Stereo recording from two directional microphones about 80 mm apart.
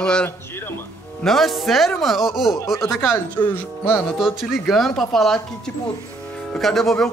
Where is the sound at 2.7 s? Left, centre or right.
Left.